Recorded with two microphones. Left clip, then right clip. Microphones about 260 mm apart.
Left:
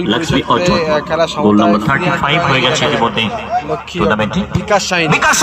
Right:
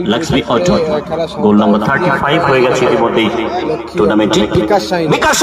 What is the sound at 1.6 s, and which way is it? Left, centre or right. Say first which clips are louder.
Speech: even; centre.